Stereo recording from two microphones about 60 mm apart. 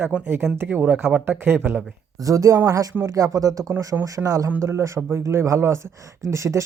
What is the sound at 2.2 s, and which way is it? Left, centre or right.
Speech, right.